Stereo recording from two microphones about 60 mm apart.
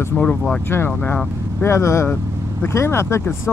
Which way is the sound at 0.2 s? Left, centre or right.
Centre.